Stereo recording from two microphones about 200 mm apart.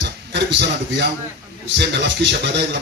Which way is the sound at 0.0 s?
60° right (ahead or behind).